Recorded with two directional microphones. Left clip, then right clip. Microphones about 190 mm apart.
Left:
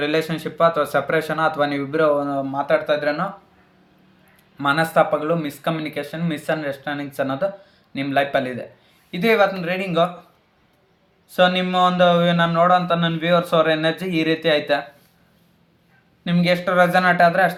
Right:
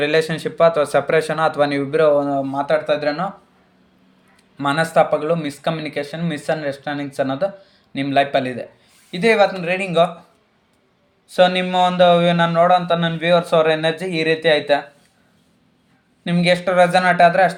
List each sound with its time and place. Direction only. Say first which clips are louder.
0.0 s speech: right 4 dB; 40° right (ahead or behind)
4.5 s speech: right 1 dB; 30° right (ahead or behind)
11.3 s speech: right 2 dB; 30° right (ahead or behind)
16.2 s speech: right 3 dB; 35° right (ahead or behind)